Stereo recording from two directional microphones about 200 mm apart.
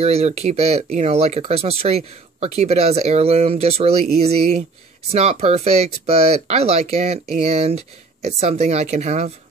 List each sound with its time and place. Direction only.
0.0 s speech: 30° right (ahead or behind)